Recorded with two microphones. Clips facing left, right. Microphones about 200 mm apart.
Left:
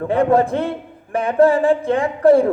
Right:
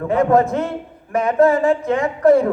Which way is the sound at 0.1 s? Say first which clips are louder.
Even; 30° left (ahead or behind).